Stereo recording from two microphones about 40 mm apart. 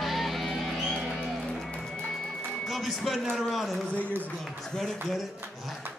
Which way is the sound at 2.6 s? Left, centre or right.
Centre.